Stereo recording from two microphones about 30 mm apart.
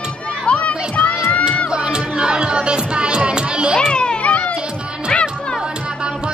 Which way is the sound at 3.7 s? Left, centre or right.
Left.